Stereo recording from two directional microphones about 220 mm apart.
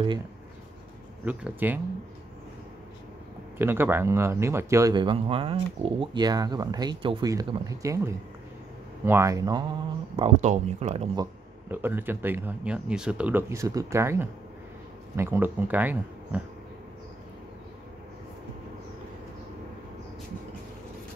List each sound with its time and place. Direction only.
1.2 s speech: 5° right (ahead or behind)
3.5 s speech: 10° right (ahead or behind)
10.1 s speech: 30° right (ahead or behind)
11.7 s speech: 10° right (ahead or behind)